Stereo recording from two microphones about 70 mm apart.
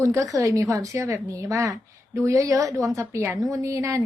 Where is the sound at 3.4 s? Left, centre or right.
Right.